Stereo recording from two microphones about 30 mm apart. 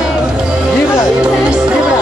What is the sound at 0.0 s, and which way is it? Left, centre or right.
Music, right.